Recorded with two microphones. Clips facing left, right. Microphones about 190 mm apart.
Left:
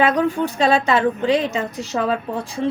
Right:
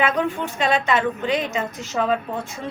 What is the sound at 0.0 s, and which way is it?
A woman's voice, 35° left (ahead or behind).